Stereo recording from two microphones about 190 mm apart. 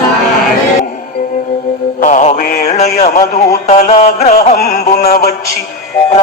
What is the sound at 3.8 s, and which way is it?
Music, 40° left (ahead or behind).